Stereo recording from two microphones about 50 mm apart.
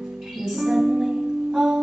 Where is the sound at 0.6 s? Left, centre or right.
Centre.